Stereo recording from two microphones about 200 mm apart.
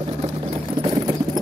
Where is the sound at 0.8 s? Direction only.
25° right (ahead or behind).